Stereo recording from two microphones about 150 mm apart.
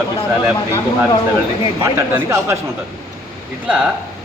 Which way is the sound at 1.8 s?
15° right (ahead or behind).